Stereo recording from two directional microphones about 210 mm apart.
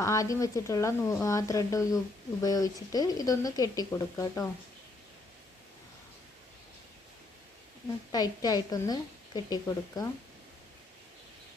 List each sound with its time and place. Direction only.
0.0 s speech: 15° left (ahead or behind)
8.1 s speech: 20° left (ahead or behind)